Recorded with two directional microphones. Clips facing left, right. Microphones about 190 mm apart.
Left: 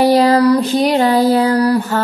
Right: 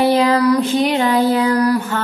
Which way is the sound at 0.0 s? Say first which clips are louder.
Left 3 dB; 35° left (ahead or behind).